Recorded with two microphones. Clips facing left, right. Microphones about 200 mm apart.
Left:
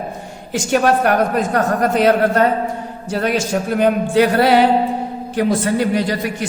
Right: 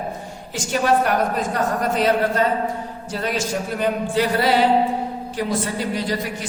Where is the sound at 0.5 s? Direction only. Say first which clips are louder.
Left 4 dB; 65° left (ahead or behind).